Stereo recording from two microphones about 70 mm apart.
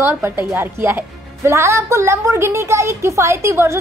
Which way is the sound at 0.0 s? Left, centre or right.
Right.